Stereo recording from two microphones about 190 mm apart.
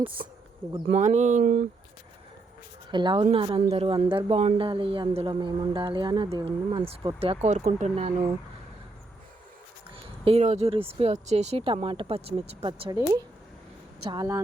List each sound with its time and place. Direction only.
0.0 s speech: 25° right (ahead or behind)
2.9 s speech: 25° right (ahead or behind)
9.9 s speech: 30° right (ahead or behind)
14.0 s speech: 20° right (ahead or behind)